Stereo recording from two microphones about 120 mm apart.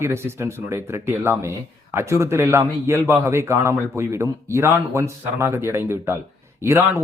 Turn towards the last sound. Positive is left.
turn(degrees=-20)  # may be behind; listen again after turning